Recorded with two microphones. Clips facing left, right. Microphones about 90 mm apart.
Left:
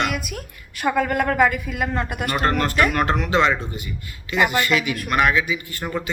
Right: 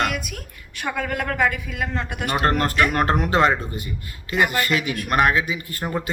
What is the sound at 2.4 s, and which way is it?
Speech, 40° right (ahead or behind).